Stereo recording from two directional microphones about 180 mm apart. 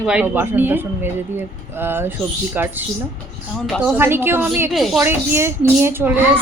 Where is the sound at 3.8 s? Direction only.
15° right (ahead or behind).